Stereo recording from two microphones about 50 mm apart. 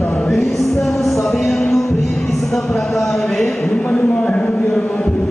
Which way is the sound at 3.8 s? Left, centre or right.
Left.